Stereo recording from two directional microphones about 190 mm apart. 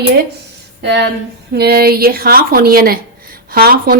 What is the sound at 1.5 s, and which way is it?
Speech, 55° right (ahead or behind).